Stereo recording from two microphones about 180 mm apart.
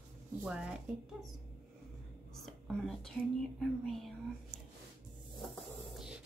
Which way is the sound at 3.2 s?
Centre (ahead or behind).